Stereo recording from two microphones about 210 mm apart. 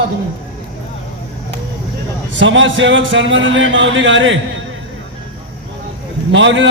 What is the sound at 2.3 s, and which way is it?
A man's voice, 60° right (ahead or behind).